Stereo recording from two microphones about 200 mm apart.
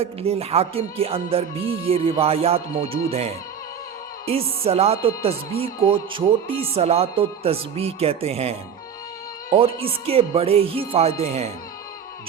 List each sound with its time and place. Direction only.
0.0 s speech: 30° right (ahead or behind)